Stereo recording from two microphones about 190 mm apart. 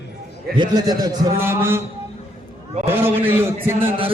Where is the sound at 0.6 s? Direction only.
20° right (ahead or behind).